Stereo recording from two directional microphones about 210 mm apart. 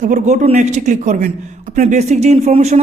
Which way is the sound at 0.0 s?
35° right (ahead or behind).